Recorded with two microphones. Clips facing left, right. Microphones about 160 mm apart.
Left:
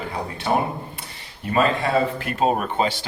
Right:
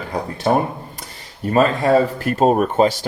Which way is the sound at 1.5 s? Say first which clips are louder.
Right 5 dB; 40° right (ahead or behind).